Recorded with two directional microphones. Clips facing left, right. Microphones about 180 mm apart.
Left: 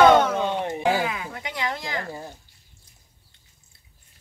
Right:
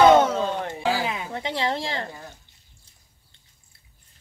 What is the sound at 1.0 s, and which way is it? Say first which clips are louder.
Speech: even; 25° right (ahead or behind).